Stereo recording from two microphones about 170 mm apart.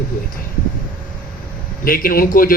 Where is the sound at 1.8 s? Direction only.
55° left (ahead or behind).